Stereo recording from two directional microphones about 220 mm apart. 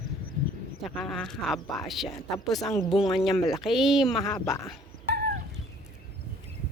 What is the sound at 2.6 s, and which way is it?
Speech, 15° left (ahead or behind).